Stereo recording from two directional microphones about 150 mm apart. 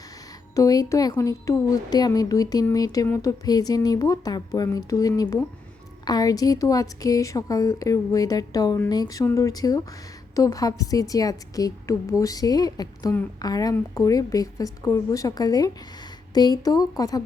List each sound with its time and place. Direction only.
0.5 s a woman's voice: 25° left (ahead or behind)